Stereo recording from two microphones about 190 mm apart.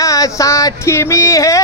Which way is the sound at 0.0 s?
15° left (ahead or behind).